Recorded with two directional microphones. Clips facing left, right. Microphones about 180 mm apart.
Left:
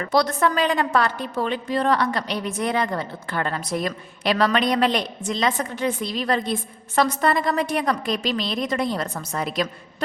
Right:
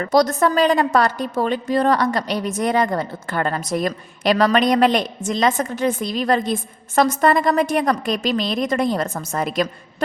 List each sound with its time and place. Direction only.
0.0 s a woman's voice: 40° right (ahead or behind)